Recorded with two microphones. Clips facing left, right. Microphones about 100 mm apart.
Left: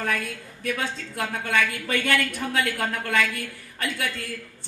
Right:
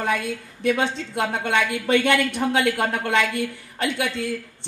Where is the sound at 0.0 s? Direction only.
20° right (ahead or behind).